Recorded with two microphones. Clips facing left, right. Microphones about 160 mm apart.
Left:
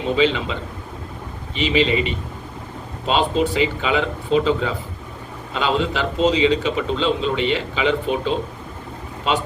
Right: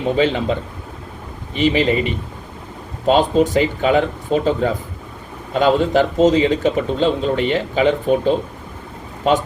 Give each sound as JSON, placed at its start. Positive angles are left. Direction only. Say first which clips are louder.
{"t": 0.2, "sound": "a man's voice", "louder": "right 1 dB", "side_deg": -50}
{"t": 1.5, "sound": "a man's voice", "louder": "right 3 dB", "side_deg": -45}
{"t": 3.1, "sound": "a man's voice", "louder": "right 5 dB", "side_deg": -45}